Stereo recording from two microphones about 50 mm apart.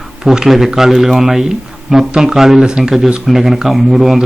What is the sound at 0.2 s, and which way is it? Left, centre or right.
A man's voice, centre.